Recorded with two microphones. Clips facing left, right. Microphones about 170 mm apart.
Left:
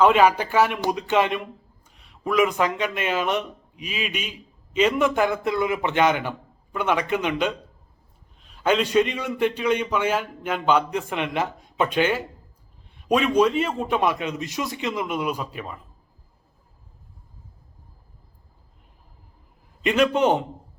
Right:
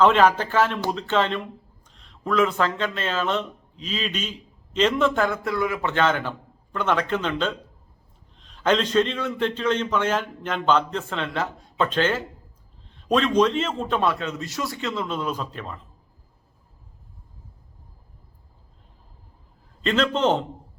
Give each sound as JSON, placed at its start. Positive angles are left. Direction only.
{"t": 0.0, "sound": "a man's voice", "side_deg": 10}
{"t": 19.8, "sound": "a man's voice", "side_deg": 15}